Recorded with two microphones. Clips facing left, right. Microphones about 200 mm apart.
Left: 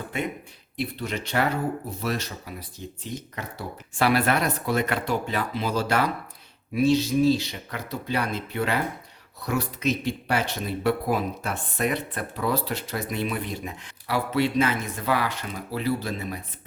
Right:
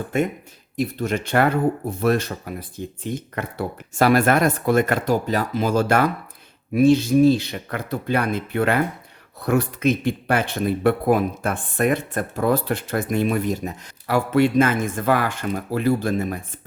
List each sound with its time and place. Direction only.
0.1 s speech: 45° right (ahead or behind)